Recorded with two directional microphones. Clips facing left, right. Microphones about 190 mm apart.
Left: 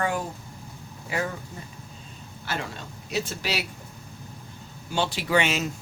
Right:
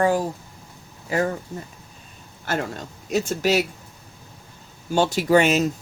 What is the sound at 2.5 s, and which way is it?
Speech, 50° right (ahead or behind).